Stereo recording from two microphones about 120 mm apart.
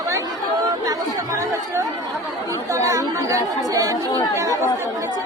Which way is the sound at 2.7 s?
25° right (ahead or behind).